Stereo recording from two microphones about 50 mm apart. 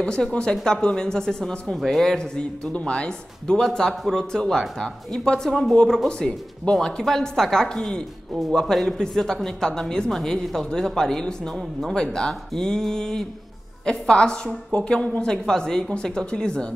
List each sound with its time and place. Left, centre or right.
0.0 s speech: centre
1.8 s speech: centre
2.8 s a woman's voice: centre